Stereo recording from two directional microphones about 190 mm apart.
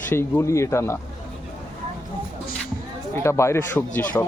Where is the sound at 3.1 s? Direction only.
15° left (ahead or behind).